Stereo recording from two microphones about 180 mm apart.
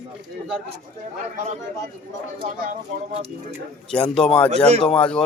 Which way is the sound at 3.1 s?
35° right (ahead or behind).